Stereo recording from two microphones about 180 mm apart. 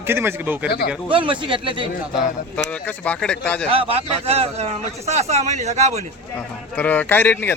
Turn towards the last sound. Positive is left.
turn(degrees=10)  # may be behind; listen again after turning